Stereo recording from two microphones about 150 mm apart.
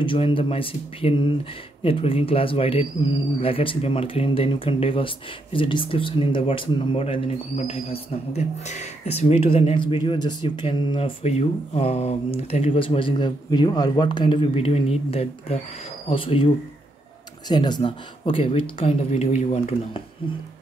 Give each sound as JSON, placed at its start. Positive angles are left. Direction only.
{"t": 0.0, "sound": "speech", "side_deg": 35}